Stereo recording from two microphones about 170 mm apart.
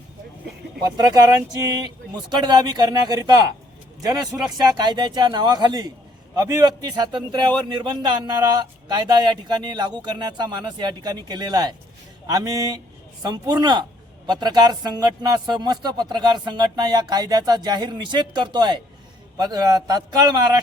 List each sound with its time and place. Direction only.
0.9 s a man's voice: 25° right (ahead or behind)